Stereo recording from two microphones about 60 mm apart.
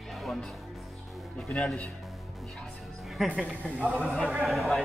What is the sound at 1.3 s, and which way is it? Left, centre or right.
Speech, centre.